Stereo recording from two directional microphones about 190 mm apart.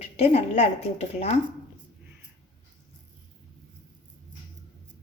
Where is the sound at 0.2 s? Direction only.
35° left (ahead or behind).